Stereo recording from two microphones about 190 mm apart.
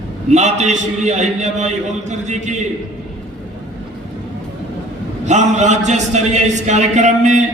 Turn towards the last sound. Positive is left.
turn(degrees=-40)  # may be behind; listen again after turning